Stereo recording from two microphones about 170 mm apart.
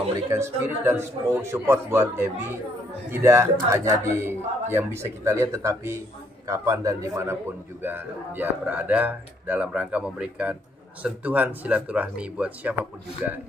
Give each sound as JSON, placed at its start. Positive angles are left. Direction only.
{"t": 0.1, "sound": "a man's voice", "side_deg": -15}